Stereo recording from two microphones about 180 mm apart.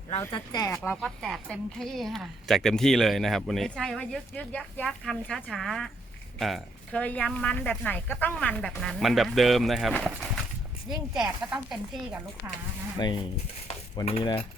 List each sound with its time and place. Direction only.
0.2 s speech: 20° left (ahead or behind)
0.7 s a woman's voice: 5° left (ahead or behind); by 12.6 s 15° right (ahead or behind)
13.0 s speech: 25° left (ahead or behind)
13.7 s cutlery: 35° left (ahead or behind)